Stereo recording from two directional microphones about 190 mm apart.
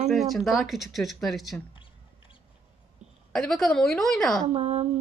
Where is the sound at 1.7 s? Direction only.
25° left (ahead or behind).